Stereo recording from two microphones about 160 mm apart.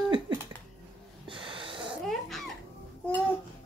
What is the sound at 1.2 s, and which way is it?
Snort, 30° right (ahead or behind).